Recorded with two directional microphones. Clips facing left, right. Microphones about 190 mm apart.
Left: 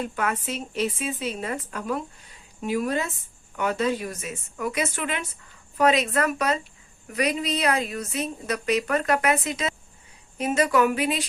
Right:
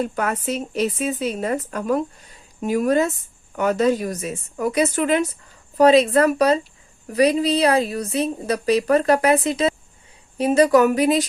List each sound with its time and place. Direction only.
0.0 s a woman's voice: 40° right (ahead or behind)